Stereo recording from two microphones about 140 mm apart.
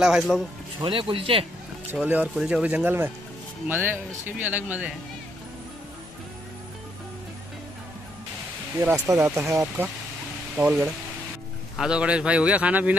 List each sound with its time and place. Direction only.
0.0 s speech: 5° right (ahead or behind)
0.7 s speech: 35° right (ahead or behind)
2.0 s speech: 10° right (ahead or behind)
8.7 s speech: 15° right (ahead or behind)
10.6 s speech: 5° right (ahead or behind)